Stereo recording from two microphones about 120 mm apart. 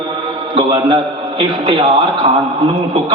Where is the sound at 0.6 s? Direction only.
50° right (ahead or behind).